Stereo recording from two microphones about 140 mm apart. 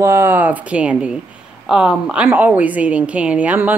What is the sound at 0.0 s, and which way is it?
Speech, 15° right (ahead or behind).